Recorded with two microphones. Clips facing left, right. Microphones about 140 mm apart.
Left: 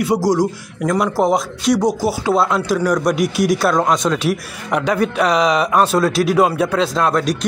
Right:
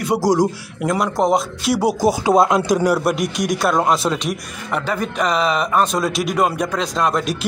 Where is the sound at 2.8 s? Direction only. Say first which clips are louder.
Left 1 dB; 10° right (ahead or behind).